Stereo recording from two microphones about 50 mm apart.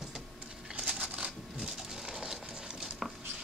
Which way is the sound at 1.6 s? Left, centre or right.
Centre.